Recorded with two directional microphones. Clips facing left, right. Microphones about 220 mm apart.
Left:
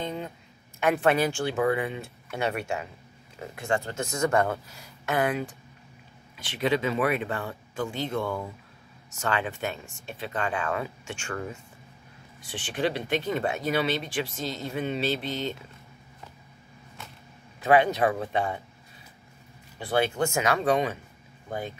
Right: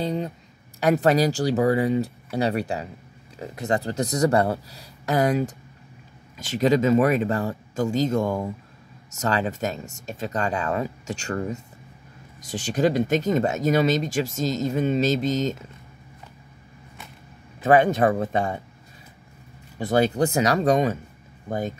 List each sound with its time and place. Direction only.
0.0 s speech: 35° right (ahead or behind)
17.6 s speech: 45° right (ahead or behind)
19.8 s speech: 40° right (ahead or behind)